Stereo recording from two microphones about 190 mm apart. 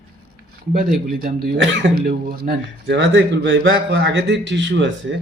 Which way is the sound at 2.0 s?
50° right (ahead or behind).